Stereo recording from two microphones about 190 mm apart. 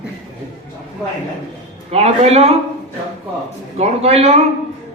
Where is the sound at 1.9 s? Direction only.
35° right (ahead or behind).